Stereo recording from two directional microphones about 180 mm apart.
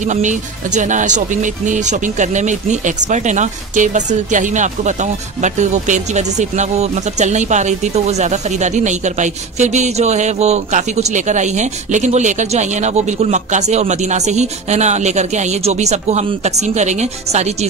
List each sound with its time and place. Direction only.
0.0 s speech: 45° right (ahead or behind)